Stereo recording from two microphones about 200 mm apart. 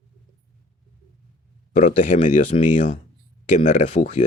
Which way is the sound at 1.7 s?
35° left (ahead or behind).